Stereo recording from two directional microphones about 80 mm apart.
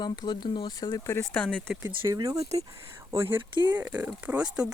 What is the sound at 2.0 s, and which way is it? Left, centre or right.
Speech, right.